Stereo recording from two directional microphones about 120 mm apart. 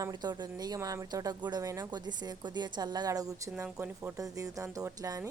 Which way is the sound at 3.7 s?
20° right (ahead or behind).